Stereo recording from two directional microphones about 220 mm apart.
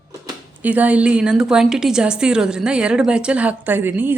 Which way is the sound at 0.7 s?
5° right (ahead or behind).